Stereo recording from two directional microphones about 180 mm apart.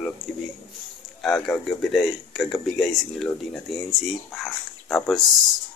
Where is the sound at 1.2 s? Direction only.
Centre (ahead or behind).